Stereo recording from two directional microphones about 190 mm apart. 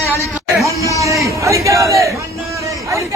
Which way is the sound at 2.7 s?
15° right (ahead or behind).